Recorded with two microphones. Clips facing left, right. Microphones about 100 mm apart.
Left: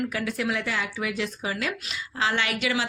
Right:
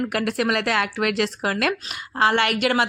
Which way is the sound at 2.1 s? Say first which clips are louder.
Right 7 dB; 55° right (ahead or behind).